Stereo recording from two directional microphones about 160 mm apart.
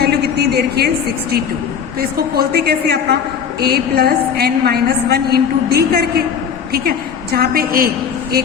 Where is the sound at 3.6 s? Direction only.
75° right (ahead or behind).